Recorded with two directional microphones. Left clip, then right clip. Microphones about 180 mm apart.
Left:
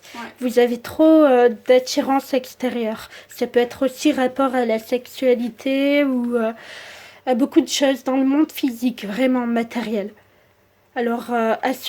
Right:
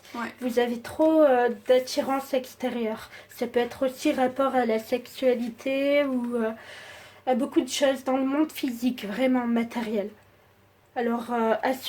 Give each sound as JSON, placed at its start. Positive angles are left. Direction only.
{"t": 0.1, "sound": "speech", "side_deg": 35}